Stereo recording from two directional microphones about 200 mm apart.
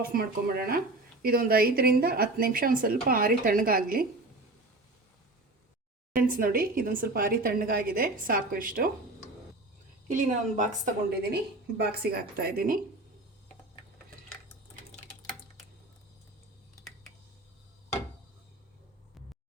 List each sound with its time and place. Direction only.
0.1 s a woman's voice: 50° right (ahead or behind)
6.1 s a woman's voice: 45° right (ahead or behind)
10.1 s a woman's voice: 40° right (ahead or behind)
11.8 s a woman's voice: 50° right (ahead or behind)
14.9 s a sound: centre (ahead or behind)